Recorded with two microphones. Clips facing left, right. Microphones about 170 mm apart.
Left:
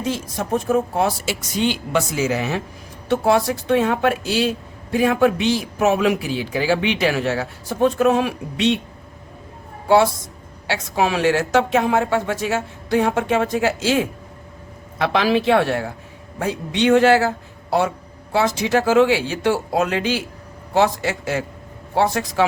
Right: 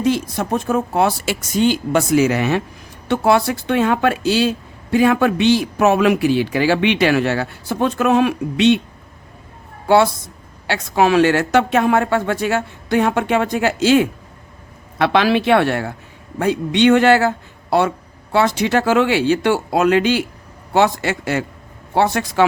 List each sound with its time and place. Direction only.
0.0 s a man's voice: 70° right (ahead or behind)
10.7 s a man's voice: 65° right (ahead or behind)